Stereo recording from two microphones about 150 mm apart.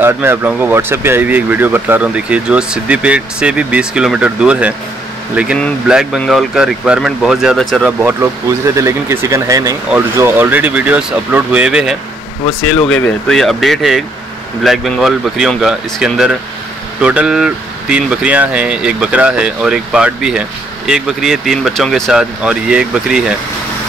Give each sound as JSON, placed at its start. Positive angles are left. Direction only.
{"t": 0.0, "sound": "speech", "side_deg": -15}
{"t": 8.0, "sound": "speech", "side_deg": -15}